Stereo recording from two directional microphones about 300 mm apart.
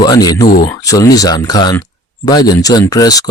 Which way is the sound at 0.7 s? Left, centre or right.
Centre.